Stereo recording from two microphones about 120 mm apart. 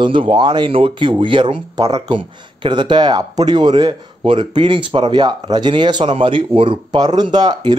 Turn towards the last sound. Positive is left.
turn(degrees=-35)  # may be behind; listen again after turning